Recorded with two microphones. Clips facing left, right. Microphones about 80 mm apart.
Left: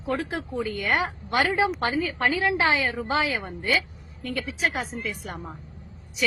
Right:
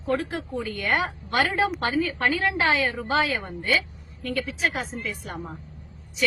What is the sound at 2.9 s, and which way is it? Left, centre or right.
Speech, centre.